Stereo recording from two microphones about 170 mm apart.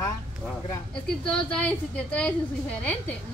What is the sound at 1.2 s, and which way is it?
A woman's voice, 5° left (ahead or behind).